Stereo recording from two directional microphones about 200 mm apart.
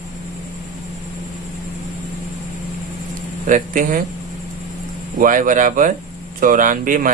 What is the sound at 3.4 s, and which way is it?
Speech, 40° right (ahead or behind).